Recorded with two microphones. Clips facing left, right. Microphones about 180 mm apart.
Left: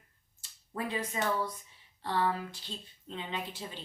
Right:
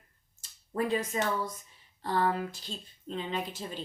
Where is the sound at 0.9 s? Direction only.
45° right (ahead or behind).